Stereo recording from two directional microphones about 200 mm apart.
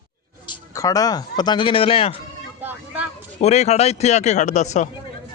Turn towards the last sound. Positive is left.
turn(degrees=35)  # may be behind; listen again after turning